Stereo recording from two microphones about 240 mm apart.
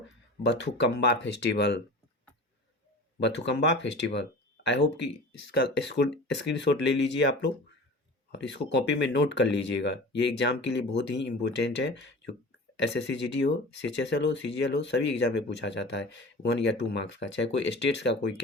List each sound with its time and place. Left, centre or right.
0.4 s speech: left
3.2 s speech: left